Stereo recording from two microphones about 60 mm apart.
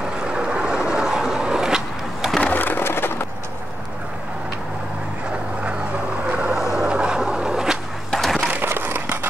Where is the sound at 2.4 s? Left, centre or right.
Left.